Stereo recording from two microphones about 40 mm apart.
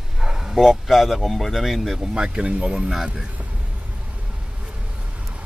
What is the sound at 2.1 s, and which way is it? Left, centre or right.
Speech, centre.